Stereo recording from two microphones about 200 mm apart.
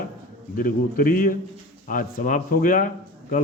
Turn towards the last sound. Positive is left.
turn(degrees=40)  # may be behind; listen again after turning